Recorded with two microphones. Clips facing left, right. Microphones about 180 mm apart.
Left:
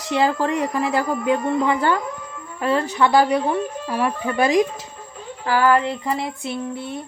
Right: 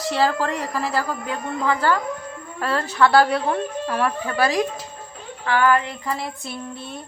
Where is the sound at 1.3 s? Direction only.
20° left (ahead or behind).